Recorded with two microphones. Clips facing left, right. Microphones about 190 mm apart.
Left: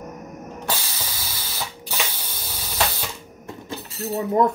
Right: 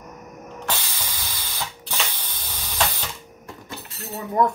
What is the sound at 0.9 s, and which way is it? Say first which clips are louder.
Spray: left 1 dB; 10° left (ahead or behind).